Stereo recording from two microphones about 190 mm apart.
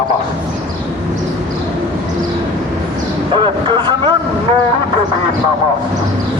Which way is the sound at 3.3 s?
25° right (ahead or behind).